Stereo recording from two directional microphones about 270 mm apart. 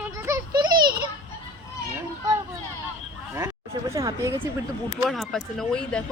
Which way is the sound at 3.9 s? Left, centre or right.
Centre.